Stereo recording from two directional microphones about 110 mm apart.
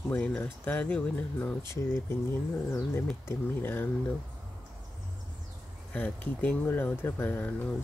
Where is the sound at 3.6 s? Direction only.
20° left (ahead or behind).